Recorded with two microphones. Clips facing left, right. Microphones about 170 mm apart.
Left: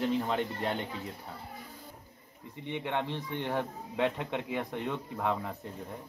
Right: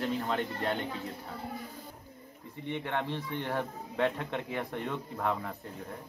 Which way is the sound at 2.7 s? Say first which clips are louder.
Left 1 dB; 15° left (ahead or behind).